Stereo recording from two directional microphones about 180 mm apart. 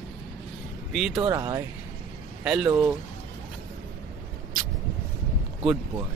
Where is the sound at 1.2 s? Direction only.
20° right (ahead or behind).